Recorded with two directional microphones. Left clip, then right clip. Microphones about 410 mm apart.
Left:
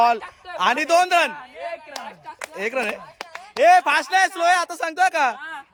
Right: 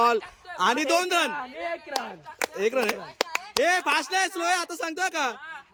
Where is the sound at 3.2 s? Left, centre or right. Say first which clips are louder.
Right 8 dB; centre.